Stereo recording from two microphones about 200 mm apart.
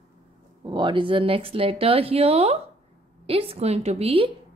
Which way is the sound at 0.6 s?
25° right (ahead or behind).